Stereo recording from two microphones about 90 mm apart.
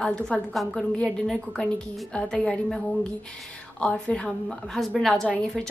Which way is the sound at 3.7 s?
10° left (ahead or behind).